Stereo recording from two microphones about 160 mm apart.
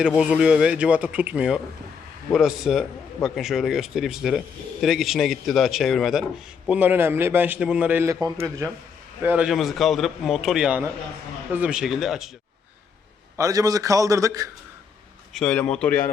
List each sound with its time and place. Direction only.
0.2 s a man's voice: 5° right (ahead or behind)
6.7 s a man's voice: 10° right (ahead or behind)
9.2 s speech: 10° right (ahead or behind)
13.3 s a man's voice: 20° right (ahead or behind)
15.3 s a man's voice: 5° left (ahead or behind)